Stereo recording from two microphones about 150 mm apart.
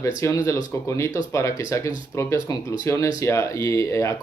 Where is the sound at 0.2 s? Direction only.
20° left (ahead or behind).